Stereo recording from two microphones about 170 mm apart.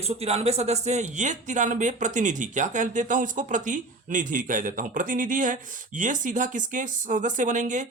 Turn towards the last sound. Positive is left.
turn(degrees=-45)  # may be behind; listen again after turning